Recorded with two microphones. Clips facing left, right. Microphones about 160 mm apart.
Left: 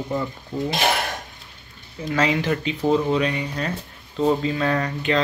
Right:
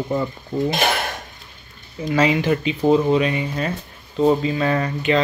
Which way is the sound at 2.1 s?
10° right (ahead or behind).